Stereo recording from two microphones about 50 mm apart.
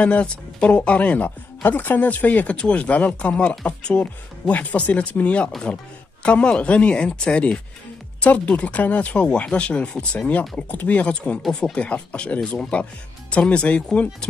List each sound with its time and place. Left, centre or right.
0.0 s speech: left
9.1 s speech: centre